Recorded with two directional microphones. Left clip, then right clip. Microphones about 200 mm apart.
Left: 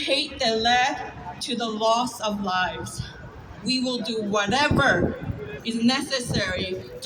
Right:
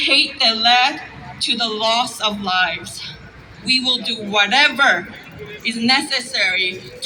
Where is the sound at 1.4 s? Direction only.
20° left (ahead or behind).